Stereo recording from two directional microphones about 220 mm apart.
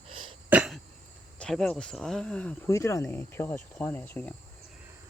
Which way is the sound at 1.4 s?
Centre (ahead or behind).